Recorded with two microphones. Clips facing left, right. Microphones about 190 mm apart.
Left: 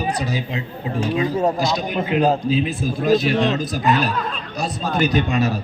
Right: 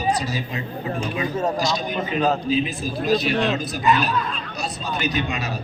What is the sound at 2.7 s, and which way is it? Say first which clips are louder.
A man's voice: left 4 dB; 50° left (ahead or behind).